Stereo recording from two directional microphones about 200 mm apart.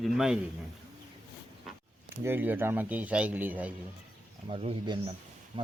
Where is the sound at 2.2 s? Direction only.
10° right (ahead or behind).